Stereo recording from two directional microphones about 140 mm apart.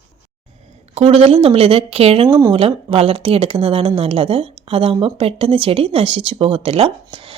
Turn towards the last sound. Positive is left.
turn(degrees=-40)  # may be behind; listen again after turning